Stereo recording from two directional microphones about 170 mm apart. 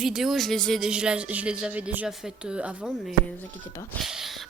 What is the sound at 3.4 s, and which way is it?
Speech, 15° left (ahead or behind).